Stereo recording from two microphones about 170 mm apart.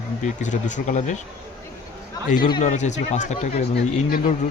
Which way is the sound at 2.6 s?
45° left (ahead or behind).